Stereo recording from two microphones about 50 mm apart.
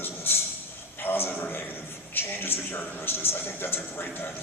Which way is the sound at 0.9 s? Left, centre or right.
Left.